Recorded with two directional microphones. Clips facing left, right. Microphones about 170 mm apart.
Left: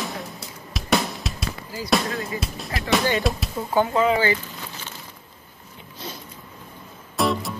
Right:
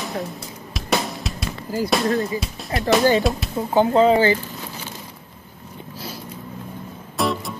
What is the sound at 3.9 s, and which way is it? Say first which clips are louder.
Speech: right 8 dB; 30° right (ahead or behind).